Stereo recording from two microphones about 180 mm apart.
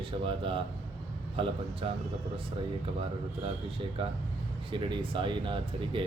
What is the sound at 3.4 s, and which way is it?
A man's voice, 30° right (ahead or behind).